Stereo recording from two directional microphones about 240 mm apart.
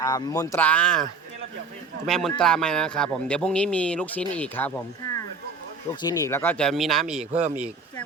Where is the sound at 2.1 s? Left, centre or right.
Centre.